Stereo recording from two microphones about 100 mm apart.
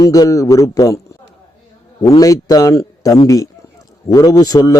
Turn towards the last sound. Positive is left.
turn(degrees=40)  # may be behind; listen again after turning